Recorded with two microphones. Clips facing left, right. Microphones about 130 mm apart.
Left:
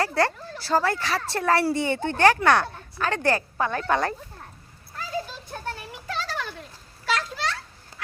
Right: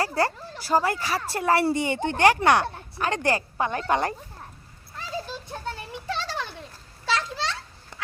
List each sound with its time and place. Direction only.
0.0 s speech: 10° right (ahead or behind)
6.1 s children playing: 25° right (ahead or behind)